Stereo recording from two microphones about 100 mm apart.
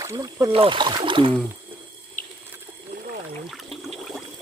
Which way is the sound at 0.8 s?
50° right (ahead or behind).